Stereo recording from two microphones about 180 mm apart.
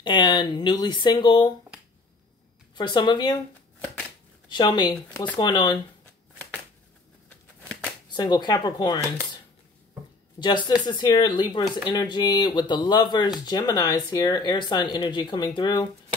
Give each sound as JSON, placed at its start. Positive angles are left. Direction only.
{"t": 0.0, "sound": "speech", "side_deg": 25}
{"t": 2.7, "sound": "speech", "side_deg": 25}
{"t": 4.5, "sound": "speech", "side_deg": 25}
{"t": 8.1, "sound": "speech", "side_deg": 25}
{"t": 10.4, "sound": "speech", "side_deg": 25}